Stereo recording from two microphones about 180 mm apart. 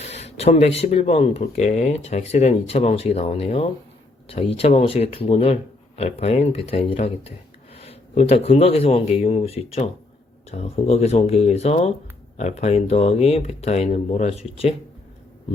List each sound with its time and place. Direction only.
0.0 s speech: 35° left (ahead or behind)